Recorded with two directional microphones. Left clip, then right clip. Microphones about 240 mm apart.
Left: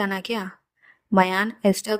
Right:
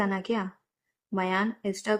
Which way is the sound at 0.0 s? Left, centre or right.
Left.